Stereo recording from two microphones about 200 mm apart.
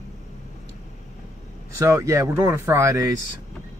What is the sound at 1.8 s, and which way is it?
Speech, 15° right (ahead or behind).